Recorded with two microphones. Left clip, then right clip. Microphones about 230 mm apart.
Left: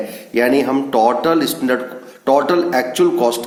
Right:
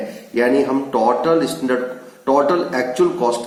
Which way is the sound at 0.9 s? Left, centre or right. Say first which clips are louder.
Left 3 dB; left.